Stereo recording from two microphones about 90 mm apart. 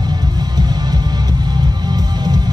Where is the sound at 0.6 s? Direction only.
50° right (ahead or behind).